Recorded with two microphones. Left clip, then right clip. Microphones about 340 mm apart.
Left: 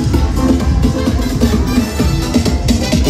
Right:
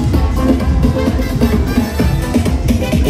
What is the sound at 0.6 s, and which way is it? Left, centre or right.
Music, centre.